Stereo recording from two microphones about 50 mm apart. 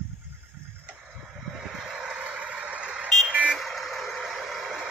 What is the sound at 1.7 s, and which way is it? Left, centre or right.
Vehicle, centre.